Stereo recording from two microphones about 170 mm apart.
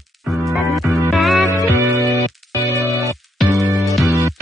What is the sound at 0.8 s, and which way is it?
Music, centre (ahead or behind).